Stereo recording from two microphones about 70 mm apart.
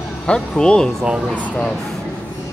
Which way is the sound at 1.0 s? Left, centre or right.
Centre.